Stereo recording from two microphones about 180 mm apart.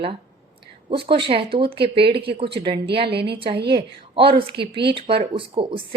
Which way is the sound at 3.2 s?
30° right (ahead or behind).